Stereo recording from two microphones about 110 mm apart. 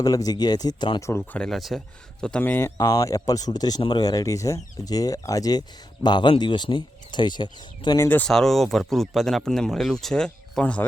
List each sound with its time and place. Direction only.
0.0 s speech: 35° left (ahead or behind)
1.3 s speech: 5° left (ahead or behind)
2.4 s speech: 20° left (ahead or behind)
2.7 s speech: 35° left (ahead or behind)
7.9 s speech: 20° left (ahead or behind)
8.3 s speech: 5° left (ahead or behind)